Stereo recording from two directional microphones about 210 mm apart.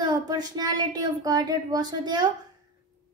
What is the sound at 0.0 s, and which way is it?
A woman's voice, 20° right (ahead or behind).